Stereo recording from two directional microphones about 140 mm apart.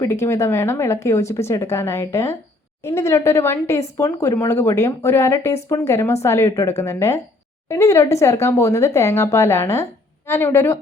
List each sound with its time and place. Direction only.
0.0 s a woman's voice: 20° left (ahead or behind)